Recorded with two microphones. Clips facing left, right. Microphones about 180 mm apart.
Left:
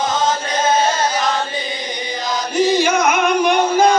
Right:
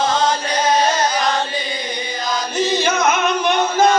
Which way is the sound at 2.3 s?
15° left (ahead or behind).